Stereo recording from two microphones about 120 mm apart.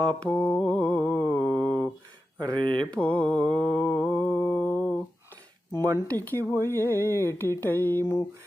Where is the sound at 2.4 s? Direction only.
35° right (ahead or behind).